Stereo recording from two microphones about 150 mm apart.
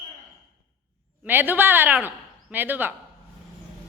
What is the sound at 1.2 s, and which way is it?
A woman's voice, 15° right (ahead or behind).